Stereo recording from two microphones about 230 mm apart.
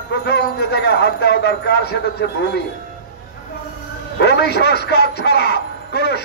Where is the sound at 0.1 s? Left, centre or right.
Left.